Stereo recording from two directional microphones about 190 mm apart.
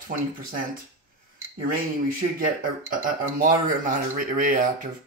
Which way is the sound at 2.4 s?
45° right (ahead or behind).